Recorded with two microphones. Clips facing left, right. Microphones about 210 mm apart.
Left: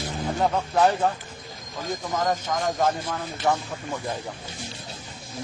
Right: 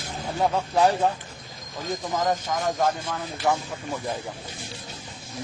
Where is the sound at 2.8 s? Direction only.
5° left (ahead or behind).